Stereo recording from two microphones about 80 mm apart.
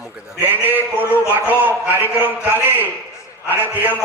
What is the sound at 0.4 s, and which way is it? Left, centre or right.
A man's voice, right.